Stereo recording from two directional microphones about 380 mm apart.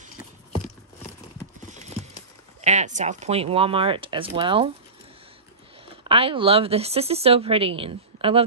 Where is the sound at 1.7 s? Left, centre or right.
Centre.